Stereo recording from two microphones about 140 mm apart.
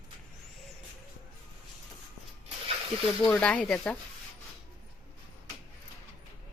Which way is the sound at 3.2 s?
10° left (ahead or behind).